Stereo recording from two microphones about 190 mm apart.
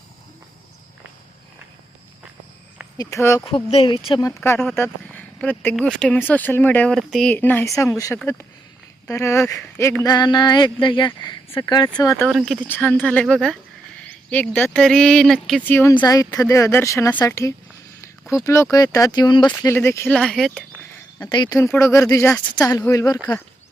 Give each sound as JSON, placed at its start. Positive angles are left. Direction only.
{"t": 3.0, "sound": "speech", "side_deg": 15}
{"t": 3.4, "sound": "speech", "side_deg": 30}
{"t": 4.3, "sound": "speech", "side_deg": 10}
{"t": 12.2, "sound": "speech", "side_deg": 0}
{"t": 21.2, "sound": "speech", "side_deg": 25}